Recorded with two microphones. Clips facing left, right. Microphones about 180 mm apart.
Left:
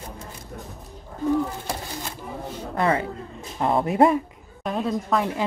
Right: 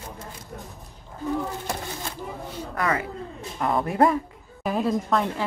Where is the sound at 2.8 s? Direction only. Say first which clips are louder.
Left 4 dB; 30° left (ahead or behind).